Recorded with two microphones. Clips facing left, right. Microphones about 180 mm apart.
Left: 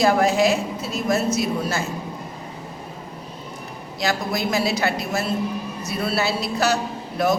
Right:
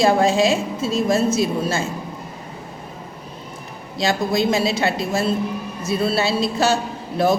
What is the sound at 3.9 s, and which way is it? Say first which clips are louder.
A woman's voice: right 4 dB; 25° right (ahead or behind).